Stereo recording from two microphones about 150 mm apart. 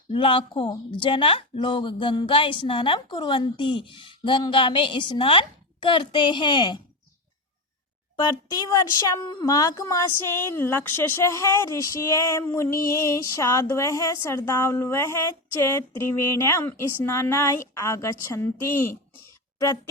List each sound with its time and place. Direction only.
0.1 s a woman's voice: 35° left (ahead or behind)
8.1 s speech: 30° left (ahead or behind)
19.5 s speech: 20° left (ahead or behind)